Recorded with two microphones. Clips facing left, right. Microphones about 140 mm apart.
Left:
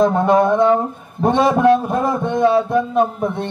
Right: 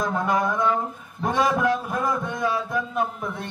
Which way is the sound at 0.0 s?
30° left (ahead or behind).